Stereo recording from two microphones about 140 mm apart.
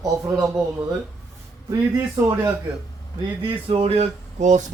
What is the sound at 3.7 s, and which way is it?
Speech, 45° right (ahead or behind).